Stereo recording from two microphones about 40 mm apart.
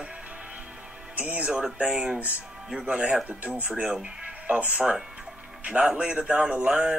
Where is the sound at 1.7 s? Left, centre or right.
Centre.